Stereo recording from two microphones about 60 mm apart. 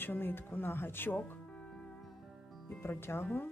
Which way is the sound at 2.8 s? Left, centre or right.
Left.